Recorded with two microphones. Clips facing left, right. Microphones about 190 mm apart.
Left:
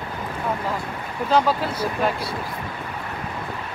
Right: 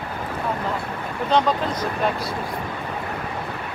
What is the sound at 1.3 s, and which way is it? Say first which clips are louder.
Speech: even; 5° left (ahead or behind).